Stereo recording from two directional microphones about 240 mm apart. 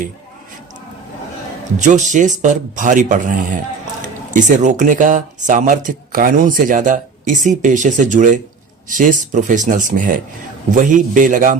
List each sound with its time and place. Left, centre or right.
1.8 s speech: right